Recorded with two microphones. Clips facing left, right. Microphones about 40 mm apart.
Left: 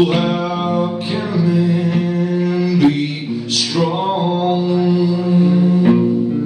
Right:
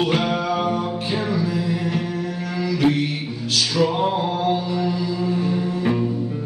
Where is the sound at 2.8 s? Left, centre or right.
Centre.